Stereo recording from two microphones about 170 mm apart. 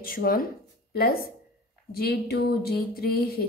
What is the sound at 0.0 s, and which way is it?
Speech, 60° left (ahead or behind).